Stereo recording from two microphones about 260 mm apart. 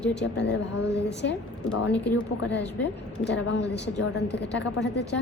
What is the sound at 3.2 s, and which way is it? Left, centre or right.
A woman's voice, left.